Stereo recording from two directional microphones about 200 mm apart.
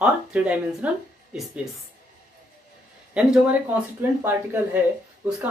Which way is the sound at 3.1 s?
5° right (ahead or behind).